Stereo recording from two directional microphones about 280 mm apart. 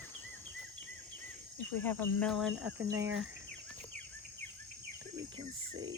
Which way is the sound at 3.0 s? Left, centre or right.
Right.